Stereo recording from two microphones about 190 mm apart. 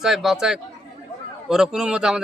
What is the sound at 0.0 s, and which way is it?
A man's voice, centre (ahead or behind).